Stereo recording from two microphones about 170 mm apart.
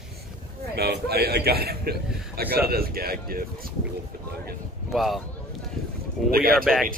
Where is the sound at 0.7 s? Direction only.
70° right (ahead or behind).